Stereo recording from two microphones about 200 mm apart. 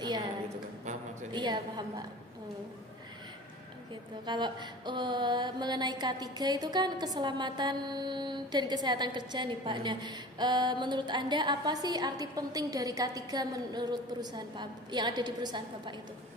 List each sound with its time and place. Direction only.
1.3 s music: 20° right (ahead or behind)
4.3 s music: 20° right (ahead or behind)